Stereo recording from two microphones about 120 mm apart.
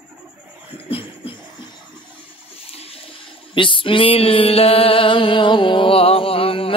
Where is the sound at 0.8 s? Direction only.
50° left (ahead or behind).